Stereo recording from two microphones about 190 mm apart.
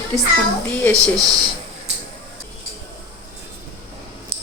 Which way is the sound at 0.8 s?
10° left (ahead or behind).